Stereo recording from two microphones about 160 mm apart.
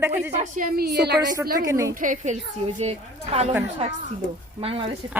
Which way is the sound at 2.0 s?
55° right (ahead or behind).